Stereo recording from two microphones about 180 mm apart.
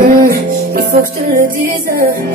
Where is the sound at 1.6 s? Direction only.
50° right (ahead or behind).